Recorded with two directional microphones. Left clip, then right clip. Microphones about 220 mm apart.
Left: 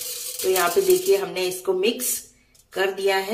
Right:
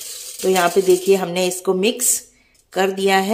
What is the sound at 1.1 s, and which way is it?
Speech, 40° right (ahead or behind).